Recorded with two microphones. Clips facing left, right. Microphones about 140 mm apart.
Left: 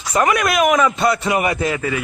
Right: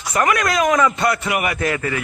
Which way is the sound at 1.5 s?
10° left (ahead or behind).